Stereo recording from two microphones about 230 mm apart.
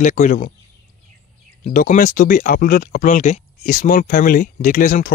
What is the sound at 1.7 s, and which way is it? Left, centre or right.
Speech, left.